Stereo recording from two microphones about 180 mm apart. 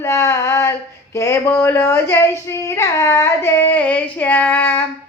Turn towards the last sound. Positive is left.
turn(degrees=10)  # may be behind; listen again after turning